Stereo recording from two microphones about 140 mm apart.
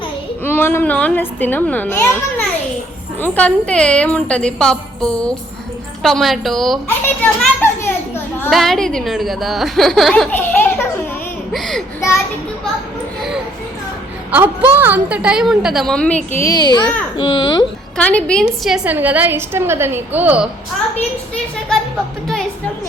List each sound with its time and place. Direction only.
0.4 s a woman's voice: 15° left (ahead or behind)
3.2 s a woman's voice: 10° left (ahead or behind)
6.8 s a woman's voice: 15° left (ahead or behind)
8.4 s a woman's voice: centre (ahead or behind)
10.3 s a woman's voice: 15° left (ahead or behind)
11.5 s a woman's voice: centre (ahead or behind)
11.9 s a child's voice: 20° left (ahead or behind)
14.3 s a woman's voice: 15° right (ahead or behind); by 16.4 s 10° left (ahead or behind)
16.4 s a child's voice: 30° left (ahead or behind)
17.9 s a woman's voice: 10° left (ahead or behind)
18.9 s a woman's voice: 10° right (ahead or behind)